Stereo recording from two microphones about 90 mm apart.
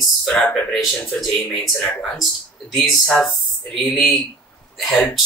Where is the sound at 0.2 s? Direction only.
5° left (ahead or behind).